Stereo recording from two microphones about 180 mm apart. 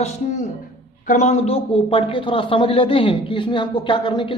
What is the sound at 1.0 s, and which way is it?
A man's voice, 40° left (ahead or behind).